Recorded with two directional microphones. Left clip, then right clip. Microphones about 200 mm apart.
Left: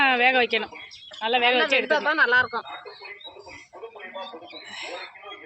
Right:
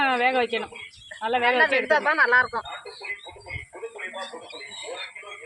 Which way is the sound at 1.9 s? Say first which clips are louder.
Right 1 dB; 20° left (ahead or behind).